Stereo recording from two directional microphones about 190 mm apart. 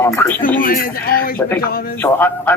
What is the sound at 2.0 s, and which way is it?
Speech, 10° left (ahead or behind).